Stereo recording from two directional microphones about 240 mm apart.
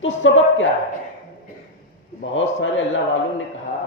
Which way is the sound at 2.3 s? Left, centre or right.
Left.